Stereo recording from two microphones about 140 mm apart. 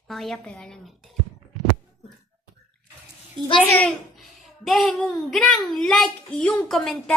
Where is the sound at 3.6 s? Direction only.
10° left (ahead or behind).